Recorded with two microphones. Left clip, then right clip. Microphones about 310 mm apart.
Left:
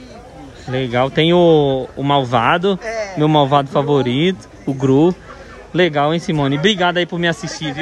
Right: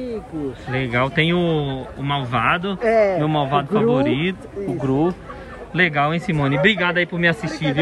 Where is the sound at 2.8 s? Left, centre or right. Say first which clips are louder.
Right 7 dB; right.